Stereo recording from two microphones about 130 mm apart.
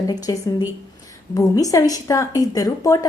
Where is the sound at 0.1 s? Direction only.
30° left (ahead or behind).